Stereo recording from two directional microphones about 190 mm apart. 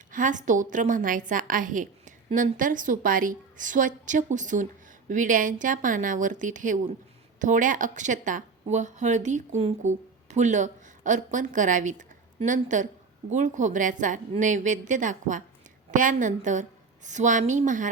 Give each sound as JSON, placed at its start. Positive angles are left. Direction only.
{"t": 0.1, "sound": "a woman's voice", "side_deg": -40}